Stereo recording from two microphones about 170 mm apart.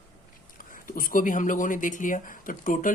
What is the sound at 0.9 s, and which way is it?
Speech, 55° left (ahead or behind).